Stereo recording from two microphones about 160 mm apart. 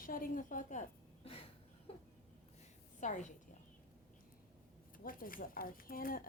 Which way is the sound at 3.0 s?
50° left (ahead or behind).